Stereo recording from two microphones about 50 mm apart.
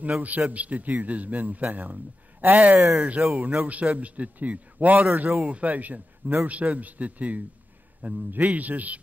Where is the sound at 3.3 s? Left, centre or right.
Right.